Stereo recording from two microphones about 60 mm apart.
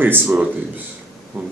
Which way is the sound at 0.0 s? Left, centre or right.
Right.